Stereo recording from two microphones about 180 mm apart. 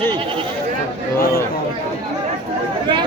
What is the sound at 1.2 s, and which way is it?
Speech, 55° left (ahead or behind).